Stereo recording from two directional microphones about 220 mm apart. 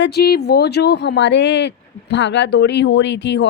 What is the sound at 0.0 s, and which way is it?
A woman's voice, 45° left (ahead or behind).